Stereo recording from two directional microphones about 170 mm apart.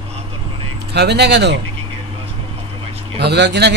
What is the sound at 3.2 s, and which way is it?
Speech, 85° right.